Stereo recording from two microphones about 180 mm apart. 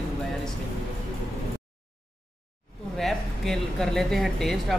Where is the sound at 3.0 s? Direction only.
Centre (ahead or behind).